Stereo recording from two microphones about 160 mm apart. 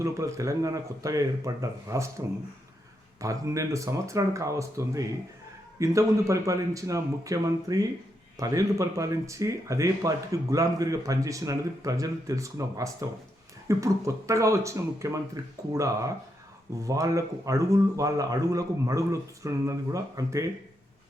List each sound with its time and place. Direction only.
0.0 s speech: 20° right (ahead or behind)